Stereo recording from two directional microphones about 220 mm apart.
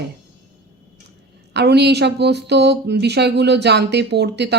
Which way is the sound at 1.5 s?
50° right (ahead or behind).